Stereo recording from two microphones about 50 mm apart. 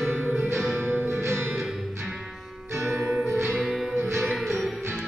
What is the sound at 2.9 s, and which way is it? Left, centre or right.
Music, centre.